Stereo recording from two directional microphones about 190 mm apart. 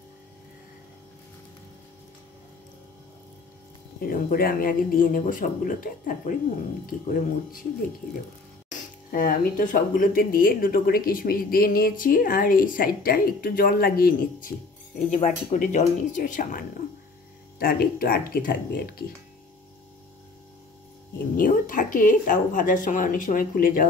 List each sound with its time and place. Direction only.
4.0 s speech: 50° left (ahead or behind)
8.6 s speech: 50° left (ahead or behind)
15.0 s speech: 40° left (ahead or behind)
21.4 s speech: 45° left (ahead or behind)